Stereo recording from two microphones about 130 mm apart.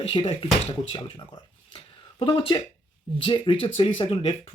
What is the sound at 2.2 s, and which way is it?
Speech, 35° left (ahead or behind).